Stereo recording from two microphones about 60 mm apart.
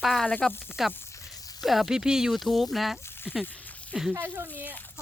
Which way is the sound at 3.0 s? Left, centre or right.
Left.